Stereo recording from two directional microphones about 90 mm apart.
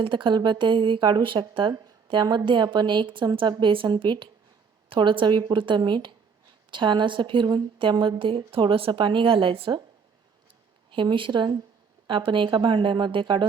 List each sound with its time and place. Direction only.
0.0 s a woman's voice: 65° right (ahead or behind)
10.9 s a woman's voice: 70° right (ahead or behind)